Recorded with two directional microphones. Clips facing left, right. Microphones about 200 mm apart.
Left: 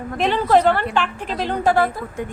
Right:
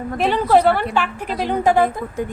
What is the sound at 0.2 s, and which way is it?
A woman's voice, 10° right (ahead or behind).